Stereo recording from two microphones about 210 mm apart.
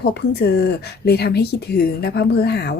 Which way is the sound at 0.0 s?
50° left (ahead or behind).